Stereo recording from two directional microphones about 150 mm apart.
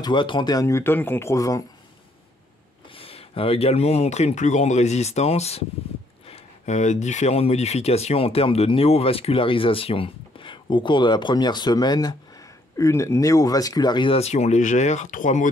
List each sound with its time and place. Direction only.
0.0 s speech: 30° left (ahead or behind)
2.9 s speech: 40° left (ahead or behind); by 15.5 s 60° left (ahead or behind)